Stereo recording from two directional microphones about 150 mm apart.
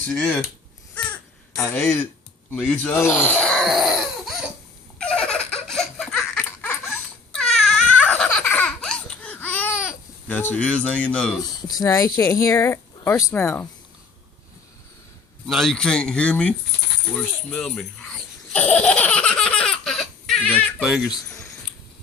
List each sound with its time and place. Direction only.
0.1 s speech: 10° left (ahead or behind)
1.6 s speech: 15° left (ahead or behind); by 4.4 s centre (ahead or behind)
4.9 s giggle: 5° left (ahead or behind)
6.4 s laughter: 15° left (ahead or behind)
7.3 s crying: 5° left (ahead or behind)
10.2 s speech: 10° left (ahead or behind)
11.7 s speech: 25° left (ahead or behind)
15.4 s speech: centre (ahead or behind)
17.2 s baby laughter: 5° left (ahead or behind)
20.8 s speech: centre (ahead or behind)